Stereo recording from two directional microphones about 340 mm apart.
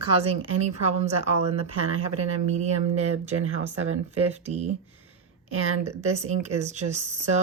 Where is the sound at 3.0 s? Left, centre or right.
Right.